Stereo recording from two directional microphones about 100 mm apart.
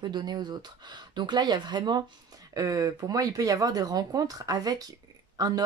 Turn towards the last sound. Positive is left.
turn(degrees=-40)  # may be behind; listen again after turning